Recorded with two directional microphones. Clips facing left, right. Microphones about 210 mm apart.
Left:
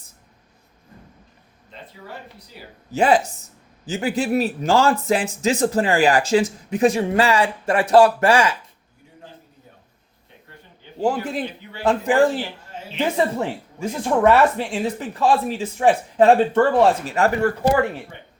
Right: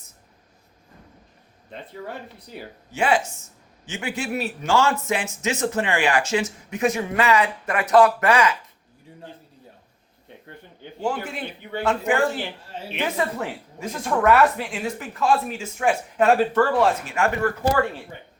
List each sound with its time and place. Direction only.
2.9 s a man's voice: 35° left (ahead or behind)
11.0 s a man's voice: 35° left (ahead or behind)
17.7 s speech: 20° left (ahead or behind)